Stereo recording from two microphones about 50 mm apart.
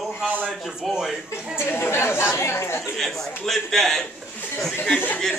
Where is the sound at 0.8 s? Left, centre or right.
Centre.